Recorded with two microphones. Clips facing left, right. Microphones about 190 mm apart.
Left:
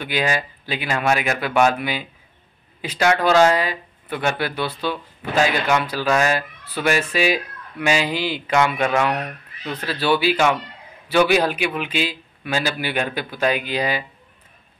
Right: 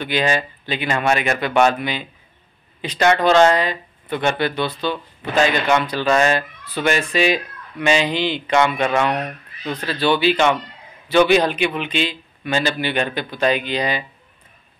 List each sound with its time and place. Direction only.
0.0 s speech: 10° left (ahead or behind)